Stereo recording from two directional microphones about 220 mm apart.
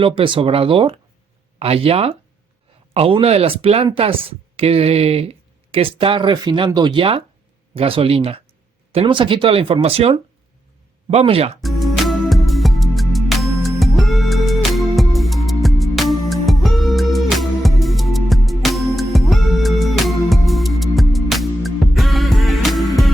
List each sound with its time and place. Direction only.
0.0 s speech: 25° right (ahead or behind)
11.6 s music: centre (ahead or behind)